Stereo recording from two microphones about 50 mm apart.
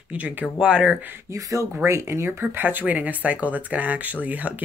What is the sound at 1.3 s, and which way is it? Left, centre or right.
Speech, right.